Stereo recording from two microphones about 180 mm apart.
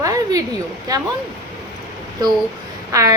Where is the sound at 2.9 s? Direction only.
15° right (ahead or behind).